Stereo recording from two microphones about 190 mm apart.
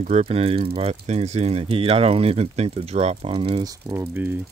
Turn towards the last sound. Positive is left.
turn(degrees=-10)  # may be behind; listen again after turning